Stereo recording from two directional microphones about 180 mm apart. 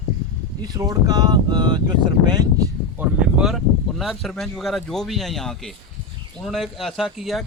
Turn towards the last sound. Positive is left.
turn(degrees=0)  # may be behind; listen again after turning